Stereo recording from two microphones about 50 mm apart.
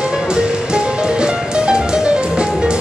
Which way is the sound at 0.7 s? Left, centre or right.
Centre.